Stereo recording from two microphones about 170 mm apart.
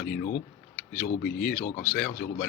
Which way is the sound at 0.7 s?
60° left (ahead or behind).